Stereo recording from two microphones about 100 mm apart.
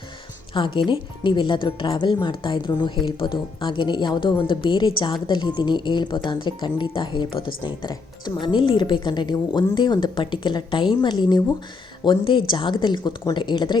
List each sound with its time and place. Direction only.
0.5 s speech: 55° left (ahead or behind)